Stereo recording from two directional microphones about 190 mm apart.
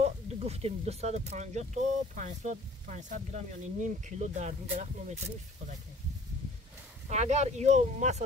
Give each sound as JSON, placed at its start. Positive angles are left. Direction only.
{"t": 0.0, "sound": "speech", "side_deg": -35}
{"t": 7.1, "sound": "speech", "side_deg": -35}